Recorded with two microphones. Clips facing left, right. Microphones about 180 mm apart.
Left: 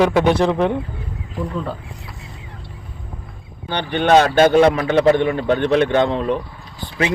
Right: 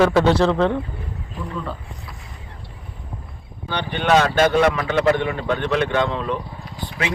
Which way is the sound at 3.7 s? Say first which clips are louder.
Left 4 dB; 35° left (ahead or behind).